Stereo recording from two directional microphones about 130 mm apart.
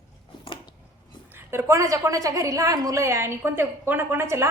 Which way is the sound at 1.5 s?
20° right (ahead or behind).